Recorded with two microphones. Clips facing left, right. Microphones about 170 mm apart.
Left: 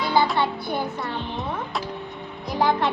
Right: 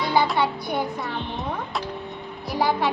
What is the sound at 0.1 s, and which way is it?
Music, 15° right (ahead or behind).